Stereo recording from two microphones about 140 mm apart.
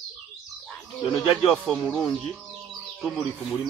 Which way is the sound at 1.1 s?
Centre (ahead or behind).